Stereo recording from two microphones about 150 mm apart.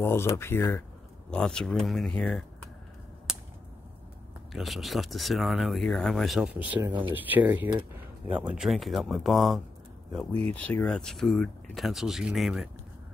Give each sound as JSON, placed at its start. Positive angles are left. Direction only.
{"t": 0.0, "sound": "speech", "side_deg": 15}
{"t": 1.3, "sound": "speech", "side_deg": 5}
{"t": 3.3, "sound": "a sound", "side_deg": -5}
{"t": 4.5, "sound": "speech", "side_deg": 0}